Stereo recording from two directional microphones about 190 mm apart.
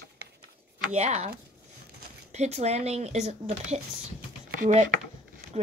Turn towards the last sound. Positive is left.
turn(degrees=-40)  # may be behind; listen again after turning